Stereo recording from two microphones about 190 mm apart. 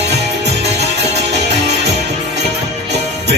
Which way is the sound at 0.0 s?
60° right (ahead or behind).